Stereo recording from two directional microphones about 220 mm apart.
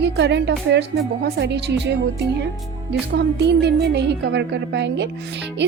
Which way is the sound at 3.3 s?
50° right (ahead or behind).